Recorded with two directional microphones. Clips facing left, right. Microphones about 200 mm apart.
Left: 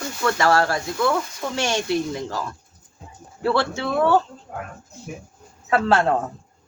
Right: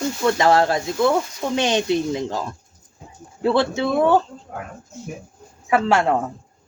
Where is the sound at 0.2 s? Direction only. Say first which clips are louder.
Right 2 dB; 20° right (ahead or behind).